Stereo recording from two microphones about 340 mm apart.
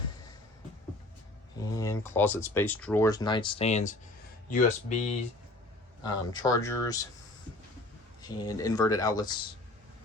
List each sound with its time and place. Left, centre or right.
1.8 s speech: centre
8.2 s speech: centre